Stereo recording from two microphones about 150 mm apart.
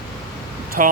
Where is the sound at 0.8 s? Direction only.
65° right (ahead or behind).